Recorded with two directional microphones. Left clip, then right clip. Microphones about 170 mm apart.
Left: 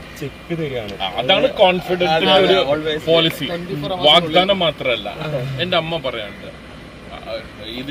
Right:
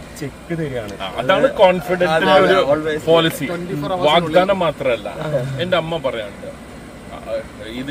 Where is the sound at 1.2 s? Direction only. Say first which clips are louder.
Right 1 dB; 10° right (ahead or behind).